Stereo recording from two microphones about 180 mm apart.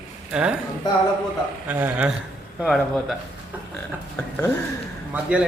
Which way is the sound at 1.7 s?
10° right (ahead or behind).